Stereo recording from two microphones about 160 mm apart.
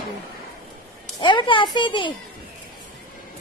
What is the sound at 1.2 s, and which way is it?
Speech, 30° left (ahead or behind).